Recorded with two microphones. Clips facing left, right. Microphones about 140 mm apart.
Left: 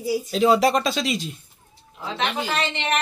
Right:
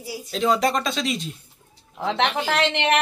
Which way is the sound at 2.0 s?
75° right (ahead or behind).